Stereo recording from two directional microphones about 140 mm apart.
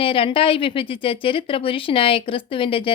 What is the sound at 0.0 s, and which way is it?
A woman's voice, 40° left (ahead or behind).